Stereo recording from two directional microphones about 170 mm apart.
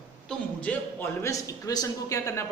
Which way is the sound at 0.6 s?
10° left (ahead or behind).